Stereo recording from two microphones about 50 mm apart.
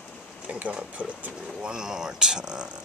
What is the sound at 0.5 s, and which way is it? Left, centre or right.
Speech, right.